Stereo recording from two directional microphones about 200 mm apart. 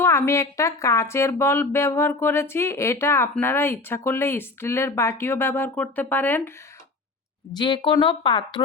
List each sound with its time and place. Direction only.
0.0 s speech: 15° left (ahead or behind)
7.5 s a woman's voice: 25° left (ahead or behind)